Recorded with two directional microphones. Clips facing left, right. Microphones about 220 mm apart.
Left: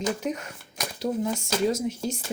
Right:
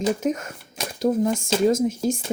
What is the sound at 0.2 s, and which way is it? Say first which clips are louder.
Speech: right 6 dB; 45° right (ahead or behind).